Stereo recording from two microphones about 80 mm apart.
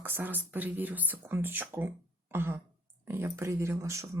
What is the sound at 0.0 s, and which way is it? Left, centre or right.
Speech, right.